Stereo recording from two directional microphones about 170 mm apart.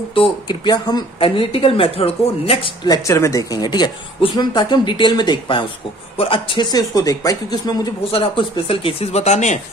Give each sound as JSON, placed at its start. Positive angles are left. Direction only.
{"t": 0.1, "sound": "speech", "side_deg": 30}